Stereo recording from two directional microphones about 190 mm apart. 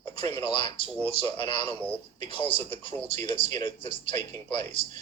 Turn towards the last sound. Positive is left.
turn(degrees=25)  # may be behind; listen again after turning